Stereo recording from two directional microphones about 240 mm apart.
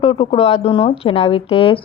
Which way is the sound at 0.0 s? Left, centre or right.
Left.